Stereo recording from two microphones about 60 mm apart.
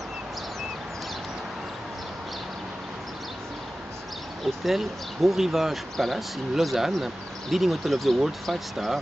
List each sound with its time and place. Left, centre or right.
4.6 s speech: centre